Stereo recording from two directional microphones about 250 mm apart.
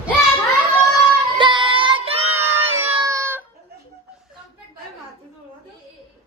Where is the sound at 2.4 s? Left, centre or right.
Centre.